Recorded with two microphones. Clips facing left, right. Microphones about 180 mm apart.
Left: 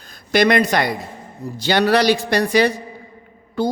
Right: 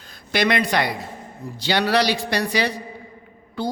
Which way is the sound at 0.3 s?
45° left (ahead or behind).